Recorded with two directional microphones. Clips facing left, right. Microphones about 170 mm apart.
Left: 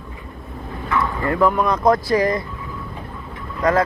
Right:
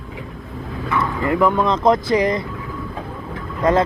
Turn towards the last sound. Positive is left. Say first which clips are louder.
# right 2 dB
turn(degrees=-25)  # may be behind; listen again after turning